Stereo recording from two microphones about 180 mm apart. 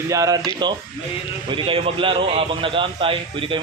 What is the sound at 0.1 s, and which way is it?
A man's voice, 20° right (ahead or behind).